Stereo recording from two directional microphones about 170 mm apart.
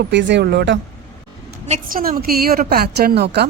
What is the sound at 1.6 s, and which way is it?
Speech, 45° right (ahead or behind).